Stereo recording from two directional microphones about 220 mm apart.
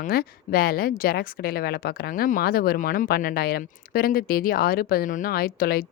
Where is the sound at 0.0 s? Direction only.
45° left (ahead or behind).